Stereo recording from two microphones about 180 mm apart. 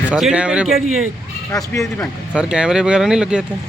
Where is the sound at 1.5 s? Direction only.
15° left (ahead or behind).